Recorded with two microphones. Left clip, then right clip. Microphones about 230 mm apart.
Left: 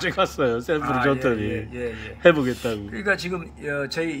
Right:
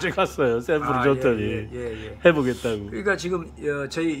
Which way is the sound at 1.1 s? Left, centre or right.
Centre.